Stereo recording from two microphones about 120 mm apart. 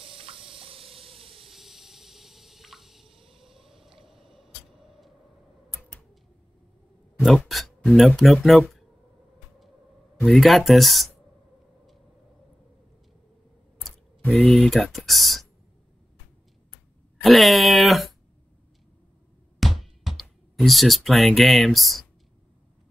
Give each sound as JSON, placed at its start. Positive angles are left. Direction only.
{"t": 0.0, "sound": "water", "side_deg": -50}
{"t": 1.5, "sound": "drip", "side_deg": 0}
{"t": 3.4, "sound": "a sound", "side_deg": -5}
{"t": 7.2, "sound": "speech", "side_deg": 0}
{"t": 10.2, "sound": "speech", "side_deg": 0}
{"t": 13.7, "sound": "speech", "side_deg": 5}
{"t": 17.2, "sound": "speech", "side_deg": 0}
{"t": 19.6, "sound": "music", "side_deg": 0}